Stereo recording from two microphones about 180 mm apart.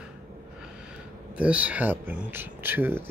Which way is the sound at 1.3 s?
5° right (ahead or behind).